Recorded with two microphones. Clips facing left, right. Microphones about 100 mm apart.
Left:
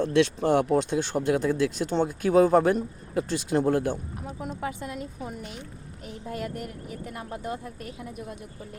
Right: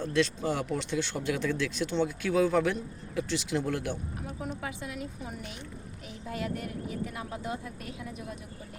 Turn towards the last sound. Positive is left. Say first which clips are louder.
# left 2 dB
turn(degrees=45)  # may be behind; listen again after turning